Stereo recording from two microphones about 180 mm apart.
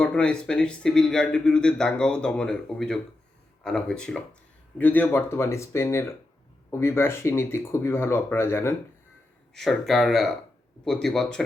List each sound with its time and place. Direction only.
0.0 s speech: 5° left (ahead or behind)
9.6 s speech: centre (ahead or behind)